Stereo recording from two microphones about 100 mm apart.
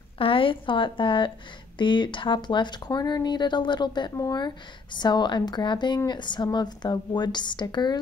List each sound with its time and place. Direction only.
0.2 s a woman's voice: 65° left (ahead or behind); by 8.0 s 45° left (ahead or behind)